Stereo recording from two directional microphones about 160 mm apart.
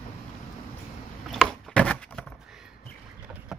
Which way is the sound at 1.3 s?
5° left (ahead or behind).